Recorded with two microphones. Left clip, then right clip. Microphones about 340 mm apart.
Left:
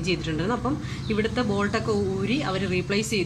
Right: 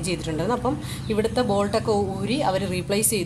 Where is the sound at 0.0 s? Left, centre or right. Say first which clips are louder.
Even; centre.